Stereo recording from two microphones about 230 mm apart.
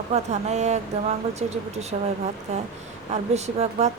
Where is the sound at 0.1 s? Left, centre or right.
Right.